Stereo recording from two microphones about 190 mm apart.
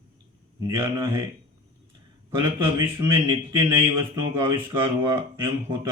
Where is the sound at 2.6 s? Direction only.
25° right (ahead or behind).